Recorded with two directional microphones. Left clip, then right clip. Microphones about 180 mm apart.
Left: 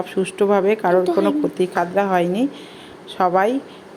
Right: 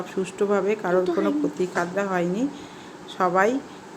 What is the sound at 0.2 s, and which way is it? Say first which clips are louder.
A woman's voice: left 6 dB; 25° left (ahead or behind).